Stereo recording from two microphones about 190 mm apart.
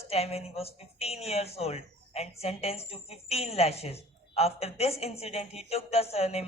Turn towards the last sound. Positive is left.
turn(degrees=35)  # may be behind; listen again after turning